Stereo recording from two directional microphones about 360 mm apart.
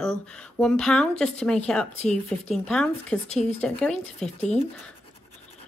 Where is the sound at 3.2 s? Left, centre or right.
Centre.